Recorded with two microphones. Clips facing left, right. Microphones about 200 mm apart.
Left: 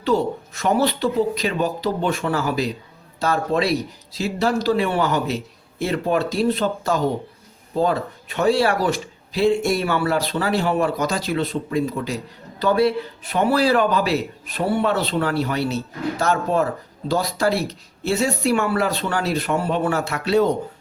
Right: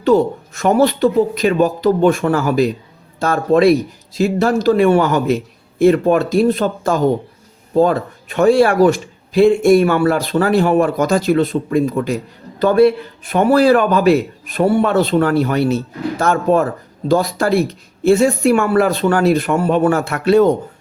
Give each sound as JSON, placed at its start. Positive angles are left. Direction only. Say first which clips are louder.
{"t": 0.0, "sound": "speech", "louder": "right 7 dB", "side_deg": -50}